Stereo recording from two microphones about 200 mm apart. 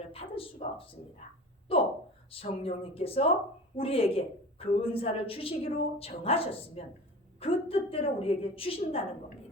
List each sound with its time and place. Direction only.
0.1 s a woman's voice: 30° left (ahead or behind)